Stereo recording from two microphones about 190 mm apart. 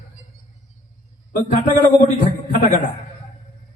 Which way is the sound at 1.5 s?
45° left (ahead or behind).